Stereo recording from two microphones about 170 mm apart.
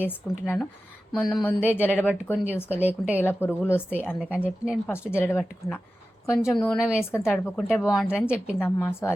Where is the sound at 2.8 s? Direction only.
10° right (ahead or behind).